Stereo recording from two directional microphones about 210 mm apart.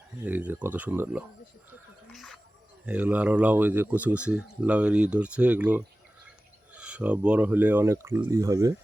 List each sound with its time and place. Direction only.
0.3 s speech: 10° right (ahead or behind)
2.1 s a sound: centre (ahead or behind)
2.8 s speech: 5° right (ahead or behind)